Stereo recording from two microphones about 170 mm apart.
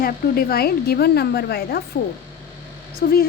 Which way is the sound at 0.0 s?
65° left (ahead or behind).